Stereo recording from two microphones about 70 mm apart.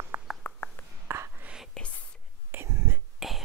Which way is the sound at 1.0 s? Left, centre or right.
Right.